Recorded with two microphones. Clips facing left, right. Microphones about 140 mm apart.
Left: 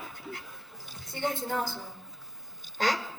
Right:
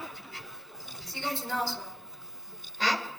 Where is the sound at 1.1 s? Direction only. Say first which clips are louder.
Left 3 dB; 50° left (ahead or behind).